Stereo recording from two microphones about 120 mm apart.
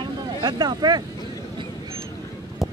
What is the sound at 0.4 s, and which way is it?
Speech, 35° right (ahead or behind).